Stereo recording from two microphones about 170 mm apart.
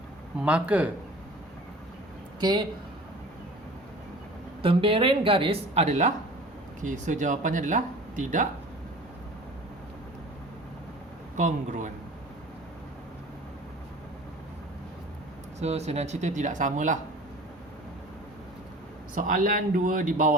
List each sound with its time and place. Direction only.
0.3 s speech: 10° right (ahead or behind)
2.4 s speech: 25° right (ahead or behind)
4.6 s a woman's voice: 30° right (ahead or behind)
11.3 s speech: 45° right (ahead or behind)
15.5 s speech: 40° right (ahead or behind)
19.1 s speech: 50° right (ahead or behind)